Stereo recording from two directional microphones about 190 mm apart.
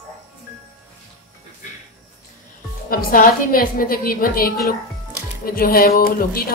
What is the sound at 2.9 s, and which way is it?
A woman's voice, 50° left (ahead or behind).